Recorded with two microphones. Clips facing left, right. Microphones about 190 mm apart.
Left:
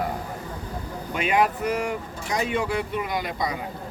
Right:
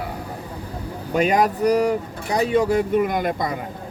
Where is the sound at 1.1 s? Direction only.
40° right (ahead or behind).